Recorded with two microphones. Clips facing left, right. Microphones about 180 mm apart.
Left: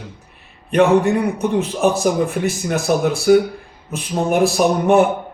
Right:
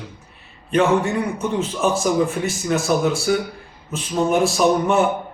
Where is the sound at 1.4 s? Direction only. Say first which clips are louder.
Left 4 dB; 60° left (ahead or behind).